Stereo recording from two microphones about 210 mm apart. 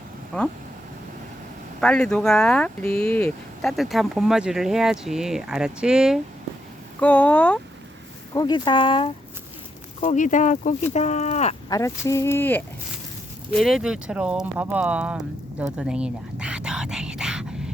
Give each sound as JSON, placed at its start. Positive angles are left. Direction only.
{"t": 0.3, "sound": "speech", "side_deg": 5}
{"t": 1.8, "sound": "speech", "side_deg": 5}
{"t": 8.3, "sound": "speech", "side_deg": 20}
{"t": 10.0, "sound": "speech", "side_deg": 35}
{"t": 11.7, "sound": "speech", "side_deg": 15}
{"t": 15.5, "sound": "whispering", "side_deg": -5}